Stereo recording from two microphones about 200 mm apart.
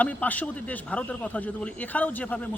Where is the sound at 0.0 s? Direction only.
10° left (ahead or behind).